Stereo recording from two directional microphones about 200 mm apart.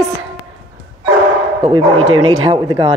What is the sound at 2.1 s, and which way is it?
Speech, 90° right.